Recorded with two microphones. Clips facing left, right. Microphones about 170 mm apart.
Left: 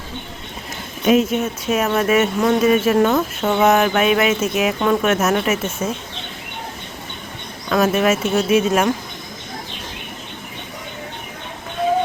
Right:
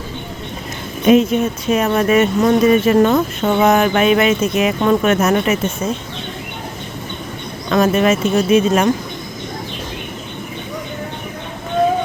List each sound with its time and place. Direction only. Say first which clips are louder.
1.0 s speech: right 4 dB; 5° left (ahead or behind)
7.7 s speech: right 2 dB; 5° left (ahead or behind)